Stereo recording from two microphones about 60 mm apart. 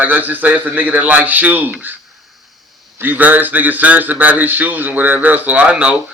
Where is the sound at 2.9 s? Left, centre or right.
Right.